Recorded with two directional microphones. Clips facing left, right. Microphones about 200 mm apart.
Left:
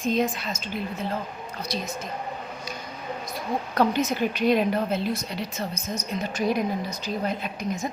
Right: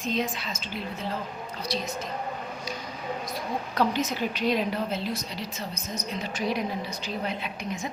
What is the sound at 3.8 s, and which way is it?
A woman's voice, 50° left (ahead or behind).